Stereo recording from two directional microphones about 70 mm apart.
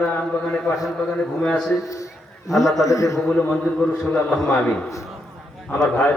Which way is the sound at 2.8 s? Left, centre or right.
Left.